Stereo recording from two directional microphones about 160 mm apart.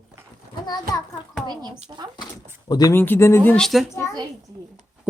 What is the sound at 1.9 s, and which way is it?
Speech, 25° right (ahead or behind).